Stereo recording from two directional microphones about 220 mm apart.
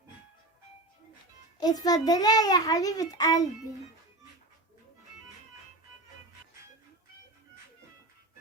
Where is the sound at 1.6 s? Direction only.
15° left (ahead or behind).